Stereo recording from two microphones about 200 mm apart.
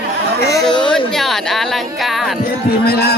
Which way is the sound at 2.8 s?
50° left (ahead or behind).